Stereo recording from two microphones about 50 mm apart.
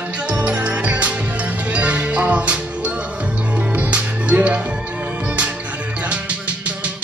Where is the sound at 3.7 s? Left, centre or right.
Right.